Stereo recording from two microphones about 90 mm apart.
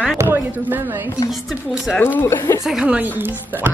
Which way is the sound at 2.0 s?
20° left (ahead or behind).